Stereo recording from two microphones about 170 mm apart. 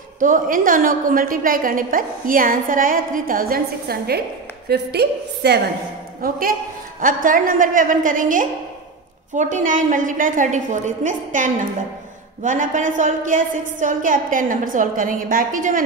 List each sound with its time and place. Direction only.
0.2 s a woman's voice: 55° right (ahead or behind); by 5.6 s 75° right (ahead or behind)
6.2 s a woman's voice: 60° right (ahead or behind)